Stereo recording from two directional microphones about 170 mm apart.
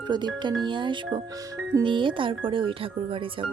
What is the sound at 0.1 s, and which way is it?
Speech, 25° right (ahead or behind).